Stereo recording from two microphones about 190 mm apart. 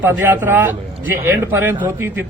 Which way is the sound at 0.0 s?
10° right (ahead or behind).